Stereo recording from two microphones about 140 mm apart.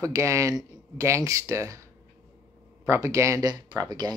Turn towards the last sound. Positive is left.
turn(degrees=-30)  # may be behind; listen again after turning